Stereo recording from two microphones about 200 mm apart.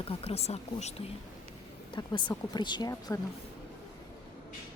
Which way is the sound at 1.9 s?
20° left (ahead or behind).